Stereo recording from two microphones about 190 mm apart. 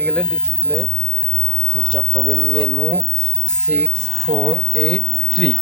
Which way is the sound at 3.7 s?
40° right (ahead or behind).